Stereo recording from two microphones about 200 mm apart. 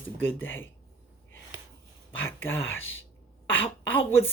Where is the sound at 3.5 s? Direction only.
10° left (ahead or behind).